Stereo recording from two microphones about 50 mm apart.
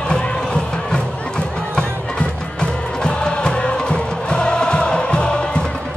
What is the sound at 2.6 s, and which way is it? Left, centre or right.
Music, centre.